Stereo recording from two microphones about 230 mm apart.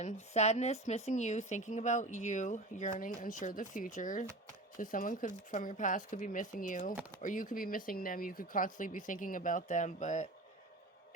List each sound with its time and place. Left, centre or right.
0.0 s a woman's voice: left